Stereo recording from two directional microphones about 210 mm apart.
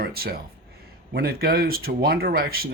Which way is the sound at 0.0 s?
45° right (ahead or behind).